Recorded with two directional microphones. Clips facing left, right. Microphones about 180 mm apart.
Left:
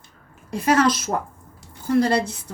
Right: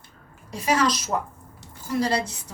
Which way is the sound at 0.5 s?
55° left (ahead or behind).